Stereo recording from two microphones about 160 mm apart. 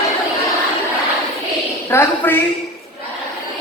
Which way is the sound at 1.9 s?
15° left (ahead or behind).